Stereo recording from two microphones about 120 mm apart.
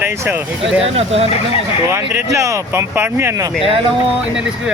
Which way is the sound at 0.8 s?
55° right (ahead or behind).